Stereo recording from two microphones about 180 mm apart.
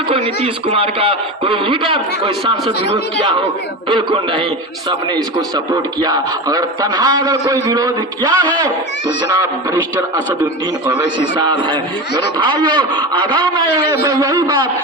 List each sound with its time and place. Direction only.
0.1 s a man's voice: 30° right (ahead or behind)
3.8 s a man's voice: 25° right (ahead or behind)
5.7 s a man's voice: 20° right (ahead or behind)
10.4 s a man's voice: 15° right (ahead or behind)